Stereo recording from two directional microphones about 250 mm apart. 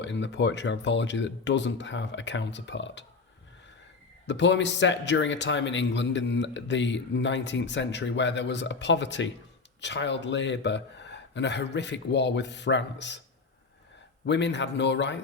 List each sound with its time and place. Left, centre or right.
0.0 s a man's voice: left
4.3 s a man's voice: left
14.3 s a man's voice: left